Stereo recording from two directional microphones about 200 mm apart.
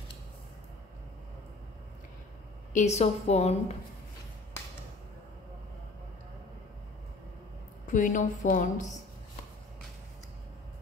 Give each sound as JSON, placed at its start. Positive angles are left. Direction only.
{"t": 2.7, "sound": "a woman's voice", "side_deg": 35}
{"t": 7.9, "sound": "a woman's voice", "side_deg": 40}